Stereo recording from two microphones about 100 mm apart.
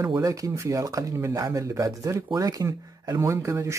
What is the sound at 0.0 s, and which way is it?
Speech, 40° right (ahead or behind).